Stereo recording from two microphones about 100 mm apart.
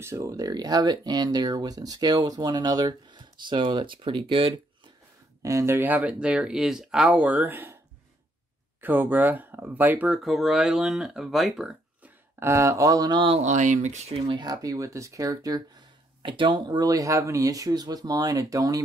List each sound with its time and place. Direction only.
0.0 s speech: 30° right (ahead or behind); by 4.9 s 60° right (ahead or behind)
5.4 s speech: 30° right (ahead or behind)
8.8 s speech: 20° right (ahead or behind)
10.2 s speech: 5° right (ahead or behind)
12.4 s speech: 25° right (ahead or behind)
14.2 s speech: 55° right (ahead or behind)
14.5 s speech: 35° right (ahead or behind)